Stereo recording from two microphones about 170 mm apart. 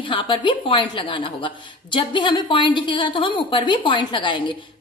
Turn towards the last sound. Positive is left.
turn(degrees=30)  # may be behind; listen again after turning